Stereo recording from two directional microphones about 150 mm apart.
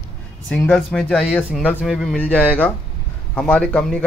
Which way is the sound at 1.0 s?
Centre (ahead or behind).